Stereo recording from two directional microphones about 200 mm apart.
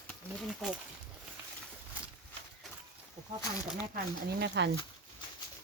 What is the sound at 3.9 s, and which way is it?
Speech, 60° right (ahead or behind).